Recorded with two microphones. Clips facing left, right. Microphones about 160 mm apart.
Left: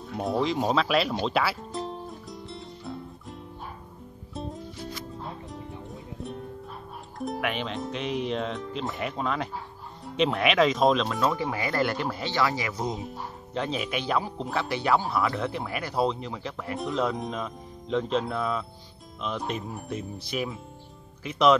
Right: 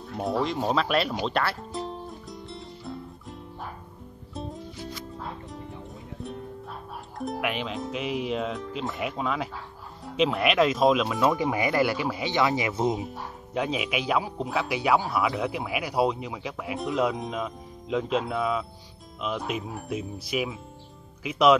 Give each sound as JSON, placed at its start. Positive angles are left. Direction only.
{"t": 0.1, "sound": "speech", "side_deg": 0}
{"t": 1.2, "sound": "music", "side_deg": 5}
{"t": 7.2, "sound": "speech", "side_deg": 0}
{"t": 11.2, "sound": "speech", "side_deg": -15}
{"t": 13.6, "sound": "speech", "side_deg": -10}